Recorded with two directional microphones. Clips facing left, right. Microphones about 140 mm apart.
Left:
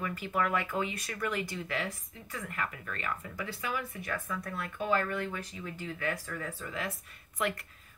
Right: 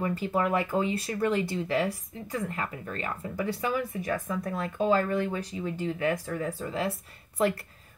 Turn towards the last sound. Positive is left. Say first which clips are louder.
# right 7 dB
turn(degrees=-30)  # may be behind; listen again after turning